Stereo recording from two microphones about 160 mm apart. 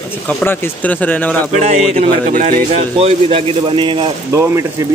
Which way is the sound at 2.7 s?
40° right (ahead or behind).